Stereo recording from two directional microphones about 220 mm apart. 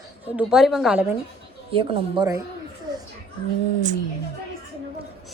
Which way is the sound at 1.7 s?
20° right (ahead or behind).